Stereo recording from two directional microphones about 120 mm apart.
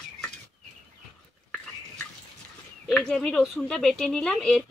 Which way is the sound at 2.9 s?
5° left (ahead or behind).